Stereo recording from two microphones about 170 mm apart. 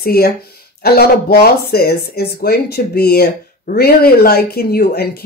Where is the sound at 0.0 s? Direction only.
65° left (ahead or behind).